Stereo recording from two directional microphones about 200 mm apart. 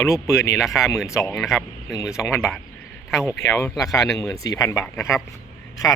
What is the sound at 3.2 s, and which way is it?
Speech, 15° left (ahead or behind).